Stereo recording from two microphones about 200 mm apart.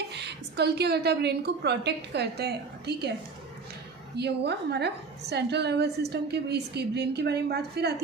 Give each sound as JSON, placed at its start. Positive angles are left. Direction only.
{"t": 0.1, "sound": "a woman's voice", "side_deg": -55}
{"t": 4.2, "sound": "a woman's voice", "side_deg": -55}